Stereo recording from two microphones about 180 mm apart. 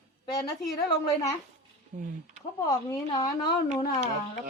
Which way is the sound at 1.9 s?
45° right (ahead or behind).